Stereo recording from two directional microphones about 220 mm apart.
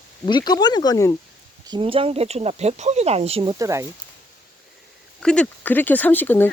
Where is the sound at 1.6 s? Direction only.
20° right (ahead or behind).